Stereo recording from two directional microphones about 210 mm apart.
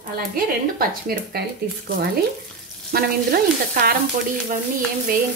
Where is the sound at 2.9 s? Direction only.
45° right (ahead or behind).